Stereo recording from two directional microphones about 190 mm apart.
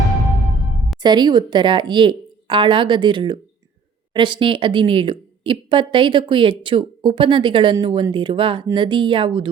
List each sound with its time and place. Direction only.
1.0 s speech: 25° right (ahead or behind)